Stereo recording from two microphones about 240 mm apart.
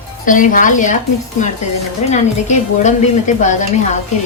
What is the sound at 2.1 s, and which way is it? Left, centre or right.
Stir, left.